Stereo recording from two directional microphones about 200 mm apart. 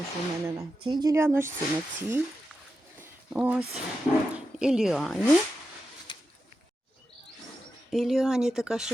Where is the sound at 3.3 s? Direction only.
5° right (ahead or behind).